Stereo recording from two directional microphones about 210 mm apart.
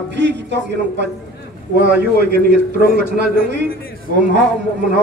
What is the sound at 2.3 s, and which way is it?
Speech, 50° right (ahead or behind).